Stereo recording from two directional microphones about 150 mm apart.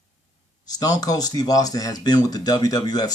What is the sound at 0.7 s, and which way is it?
Speech, 25° left (ahead or behind).